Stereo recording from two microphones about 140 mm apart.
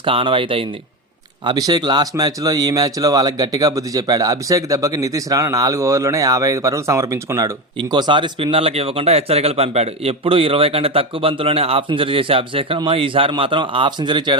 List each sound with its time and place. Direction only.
0.0 s speech: 40° right (ahead or behind)
1.5 s speech: 30° right (ahead or behind)